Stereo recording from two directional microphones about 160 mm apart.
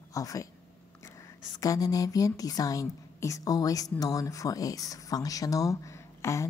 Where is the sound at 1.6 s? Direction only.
20° left (ahead or behind).